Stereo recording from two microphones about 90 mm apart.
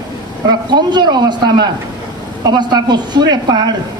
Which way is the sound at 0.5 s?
55° right (ahead or behind).